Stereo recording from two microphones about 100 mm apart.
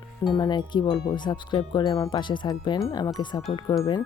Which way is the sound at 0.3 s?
45° left (ahead or behind).